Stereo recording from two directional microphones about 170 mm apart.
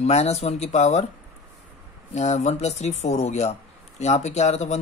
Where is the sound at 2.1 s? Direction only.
40° left (ahead or behind).